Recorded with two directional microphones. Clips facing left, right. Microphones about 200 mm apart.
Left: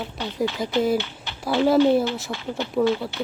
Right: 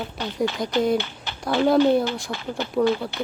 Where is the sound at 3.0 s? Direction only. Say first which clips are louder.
Even; centre (ahead or behind).